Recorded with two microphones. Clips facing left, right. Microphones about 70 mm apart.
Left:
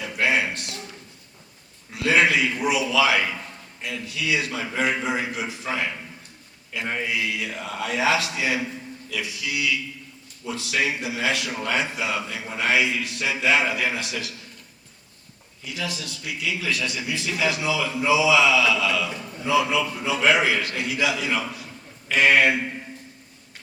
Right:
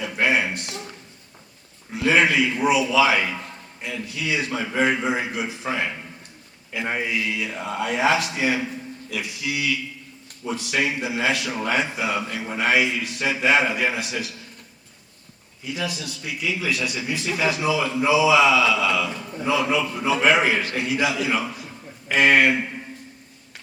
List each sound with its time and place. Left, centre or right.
0.0 s a sound: right
1.9 s a man's voice: right
7.1 s a man's voice: right
15.6 s a man's voice: right